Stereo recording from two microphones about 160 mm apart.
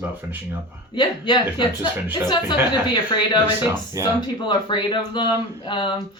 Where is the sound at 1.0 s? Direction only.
30° left (ahead or behind).